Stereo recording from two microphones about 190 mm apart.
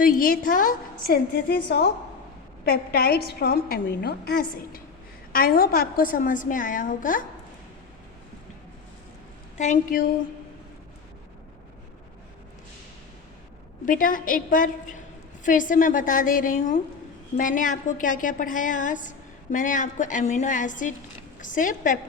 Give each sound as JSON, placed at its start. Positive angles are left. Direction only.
{"t": 0.0, "sound": "a woman's voice", "side_deg": 45}
{"t": 9.6, "sound": "a woman's voice", "side_deg": 45}
{"t": 13.8, "sound": "a woman's voice", "side_deg": 45}